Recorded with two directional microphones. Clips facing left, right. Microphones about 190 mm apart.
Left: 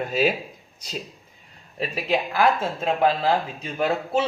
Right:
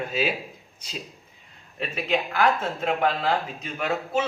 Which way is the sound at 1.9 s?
35° left (ahead or behind).